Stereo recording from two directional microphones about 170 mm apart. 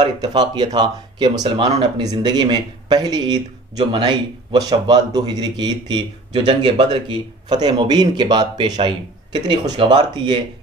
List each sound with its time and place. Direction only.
0.0 s speech: 25° right (ahead or behind)